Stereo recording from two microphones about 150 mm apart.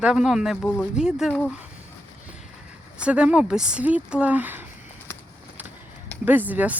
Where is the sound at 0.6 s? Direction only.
10° left (ahead or behind).